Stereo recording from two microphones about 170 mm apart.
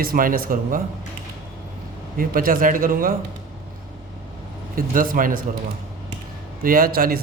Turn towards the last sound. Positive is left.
turn(degrees=-60)  # may be behind; listen again after turning